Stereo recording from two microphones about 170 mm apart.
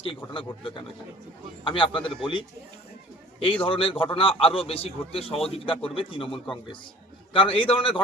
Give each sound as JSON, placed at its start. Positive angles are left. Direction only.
{"t": 1.6, "sound": "a man's voice", "side_deg": 30}
{"t": 3.4, "sound": "a man's voice", "side_deg": 30}